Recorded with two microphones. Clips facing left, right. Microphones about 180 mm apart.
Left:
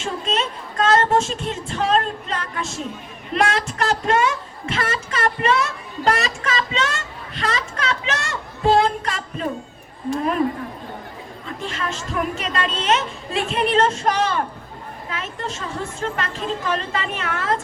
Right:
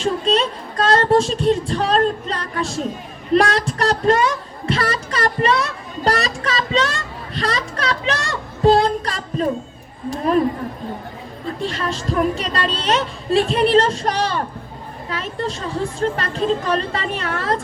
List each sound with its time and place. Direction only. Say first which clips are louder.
0.0 s speech: right 6 dB; 35° right (ahead or behind)
3.3 s music: right 4 dB; 35° right (ahead or behind)
7.3 s a sound: right 2 dB; 35° right (ahead or behind)
11.4 s a woman's voice: right 5 dB; 35° right (ahead or behind)